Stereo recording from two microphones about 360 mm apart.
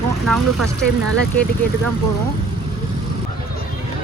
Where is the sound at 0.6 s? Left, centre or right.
Right.